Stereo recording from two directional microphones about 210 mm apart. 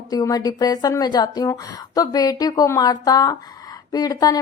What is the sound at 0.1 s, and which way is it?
A woman's voice, 20° left (ahead or behind).